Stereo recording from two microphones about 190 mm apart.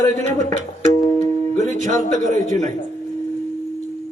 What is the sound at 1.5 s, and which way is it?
Music, 40° right (ahead or behind).